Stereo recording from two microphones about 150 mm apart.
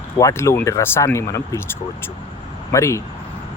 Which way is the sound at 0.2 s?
20° left (ahead or behind).